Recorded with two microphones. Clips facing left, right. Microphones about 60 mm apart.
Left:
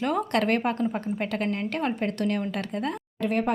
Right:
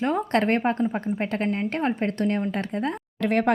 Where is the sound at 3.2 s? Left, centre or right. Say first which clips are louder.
Right 4 dB; right.